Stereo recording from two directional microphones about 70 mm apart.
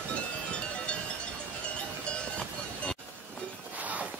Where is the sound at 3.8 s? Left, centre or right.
Right.